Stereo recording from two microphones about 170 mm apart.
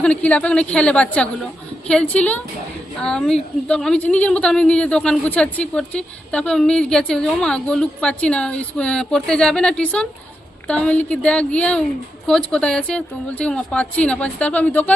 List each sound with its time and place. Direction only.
0.0 s a woman's voice: 5° left (ahead or behind)